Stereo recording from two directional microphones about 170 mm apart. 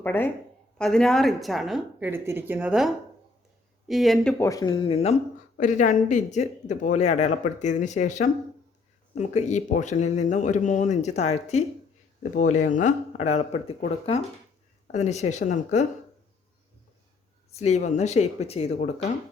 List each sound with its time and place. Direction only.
0.0 s a woman's voice: 10° left (ahead or behind)
4.4 s speech: 20° left (ahead or behind)
4.9 s speech: 40° left (ahead or behind)
17.5 s speech: 40° left (ahead or behind)